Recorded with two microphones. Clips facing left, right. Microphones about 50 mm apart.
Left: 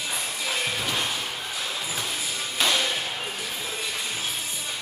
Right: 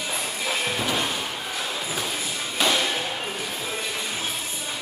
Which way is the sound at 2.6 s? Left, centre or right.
Centre.